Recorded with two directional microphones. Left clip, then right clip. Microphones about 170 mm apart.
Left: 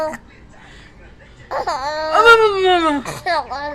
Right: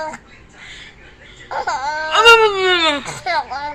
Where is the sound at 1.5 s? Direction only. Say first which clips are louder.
Even; 20° left (ahead or behind).